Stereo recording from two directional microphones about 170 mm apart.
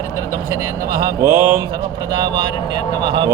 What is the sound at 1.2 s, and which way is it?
Mantra, 15° right (ahead or behind).